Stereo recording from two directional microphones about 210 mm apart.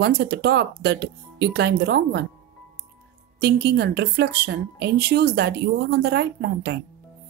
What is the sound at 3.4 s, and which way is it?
Speech, 50° right (ahead or behind).